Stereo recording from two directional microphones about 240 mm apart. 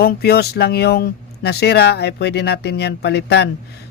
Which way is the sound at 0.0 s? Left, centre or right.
Left.